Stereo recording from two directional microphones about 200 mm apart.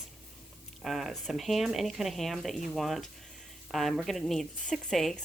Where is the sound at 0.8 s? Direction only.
Centre (ahead or behind).